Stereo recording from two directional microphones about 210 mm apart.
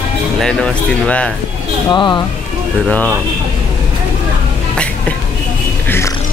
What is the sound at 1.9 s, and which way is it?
Speech, 20° left (ahead or behind).